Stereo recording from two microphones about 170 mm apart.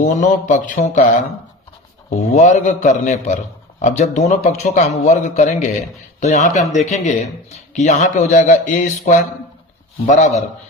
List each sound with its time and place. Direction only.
0.0 s a man's voice: 45° left (ahead or behind)
2.0 s a man's voice: 40° left (ahead or behind)